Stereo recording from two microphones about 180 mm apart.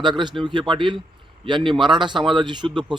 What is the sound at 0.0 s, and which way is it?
A man's voice, 25° right (ahead or behind).